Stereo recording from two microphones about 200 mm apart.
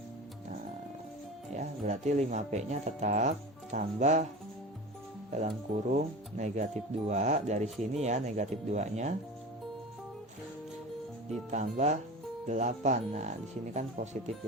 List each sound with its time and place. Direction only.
1.5 s speech: 35° right (ahead or behind)
5.5 s speech: 35° right (ahead or behind)
11.5 s speech: 35° right (ahead or behind)